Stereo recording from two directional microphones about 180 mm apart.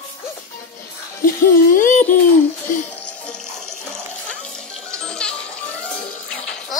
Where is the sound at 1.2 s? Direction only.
50° left (ahead or behind).